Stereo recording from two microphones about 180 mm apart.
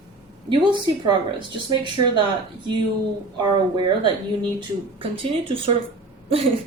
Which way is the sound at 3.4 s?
25° right (ahead or behind).